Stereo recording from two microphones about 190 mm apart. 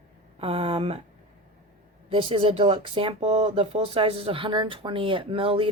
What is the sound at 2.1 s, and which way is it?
Speech, 30° right (ahead or behind).